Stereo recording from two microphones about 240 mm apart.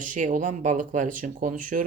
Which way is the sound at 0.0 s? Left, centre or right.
Right.